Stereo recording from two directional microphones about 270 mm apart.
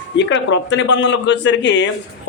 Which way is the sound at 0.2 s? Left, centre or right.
Left.